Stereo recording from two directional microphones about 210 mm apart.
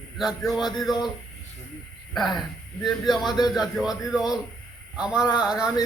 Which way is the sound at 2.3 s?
Centre (ahead or behind).